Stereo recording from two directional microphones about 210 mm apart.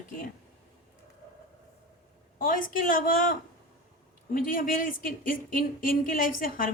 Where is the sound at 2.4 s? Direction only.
40° left (ahead or behind).